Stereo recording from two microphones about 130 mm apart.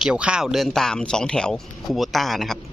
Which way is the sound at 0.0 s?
5° right (ahead or behind).